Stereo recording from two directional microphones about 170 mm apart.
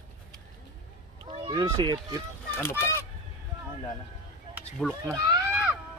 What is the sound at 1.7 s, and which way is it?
Speech, 25° right (ahead or behind).